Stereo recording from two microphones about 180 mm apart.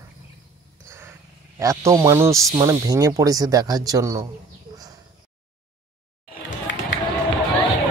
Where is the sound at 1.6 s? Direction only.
20° right (ahead or behind).